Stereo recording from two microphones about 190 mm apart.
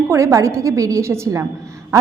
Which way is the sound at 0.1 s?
15° right (ahead or behind).